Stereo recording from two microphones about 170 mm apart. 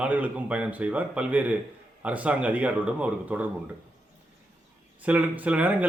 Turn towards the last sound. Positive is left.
turn(degrees=-10)  # may be behind; listen again after turning